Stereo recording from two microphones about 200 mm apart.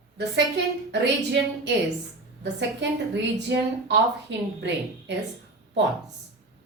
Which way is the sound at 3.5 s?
60° right (ahead or behind).